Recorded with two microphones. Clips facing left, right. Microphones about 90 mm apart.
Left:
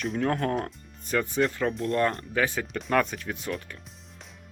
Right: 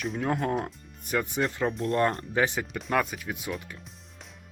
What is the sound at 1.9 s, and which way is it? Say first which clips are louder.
Speech: even; 35° right (ahead or behind).